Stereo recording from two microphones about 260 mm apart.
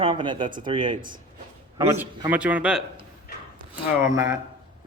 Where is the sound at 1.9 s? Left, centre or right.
Centre.